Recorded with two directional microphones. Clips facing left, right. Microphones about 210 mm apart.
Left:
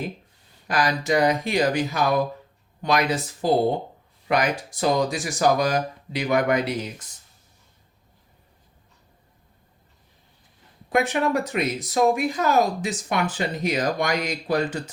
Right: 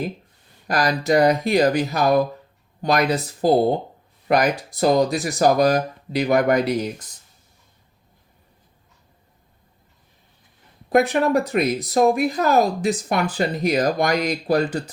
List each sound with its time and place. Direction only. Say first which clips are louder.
0.7 s speech: right 3 dB; 35° right (ahead or behind)
10.8 s speech: right 4 dB; 35° right (ahead or behind)